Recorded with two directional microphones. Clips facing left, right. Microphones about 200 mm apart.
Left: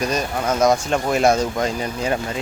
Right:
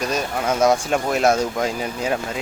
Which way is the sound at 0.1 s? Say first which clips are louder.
Left 1 dB; 5° right (ahead or behind).